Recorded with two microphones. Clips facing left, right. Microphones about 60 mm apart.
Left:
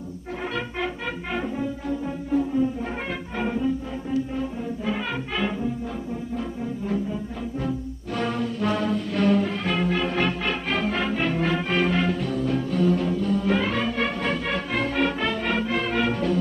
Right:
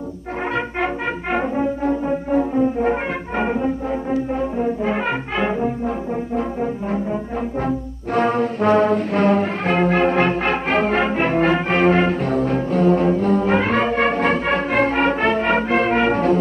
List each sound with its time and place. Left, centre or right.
0.6 s music: right
6.3 s brass instrument: right